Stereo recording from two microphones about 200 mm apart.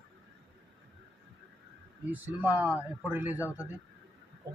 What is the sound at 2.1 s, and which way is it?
Speech, 10° right (ahead or behind).